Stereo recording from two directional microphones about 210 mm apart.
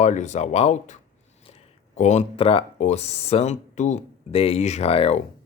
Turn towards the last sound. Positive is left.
turn(degrees=30)  # may be behind; listen again after turning